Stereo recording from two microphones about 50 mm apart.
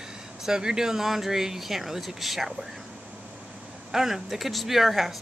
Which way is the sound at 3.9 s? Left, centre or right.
Centre.